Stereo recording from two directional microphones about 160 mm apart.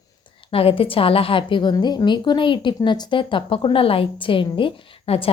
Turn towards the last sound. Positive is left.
turn(degrees=35)  # may be behind; listen again after turning